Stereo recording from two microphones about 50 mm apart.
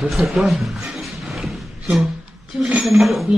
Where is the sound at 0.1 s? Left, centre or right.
Centre.